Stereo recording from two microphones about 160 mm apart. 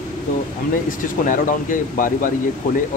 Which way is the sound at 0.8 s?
55° left (ahead or behind).